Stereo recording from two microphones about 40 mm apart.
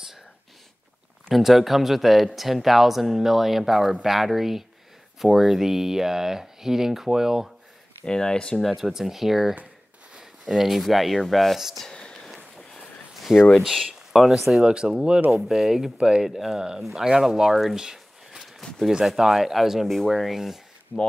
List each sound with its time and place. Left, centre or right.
1.3 s speech: centre
8.0 s speech: centre
8.6 s speech: centre
11.9 s a sound: centre
13.3 s speech: centre
14.6 s speech: centre
15.3 s speech: centre
16.0 s speech: centre
16.3 s speech: centre
17.7 s a sound: centre
18.6 s a sound: centre
18.9 s speech: centre